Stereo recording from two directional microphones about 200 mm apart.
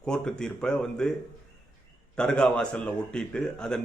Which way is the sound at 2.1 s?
5° left (ahead or behind).